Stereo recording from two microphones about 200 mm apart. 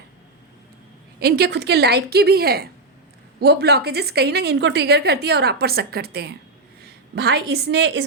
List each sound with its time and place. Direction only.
1.2 s a woman's voice: 50° right (ahead or behind)